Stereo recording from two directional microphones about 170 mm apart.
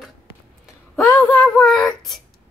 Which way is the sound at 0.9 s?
20° left (ahead or behind).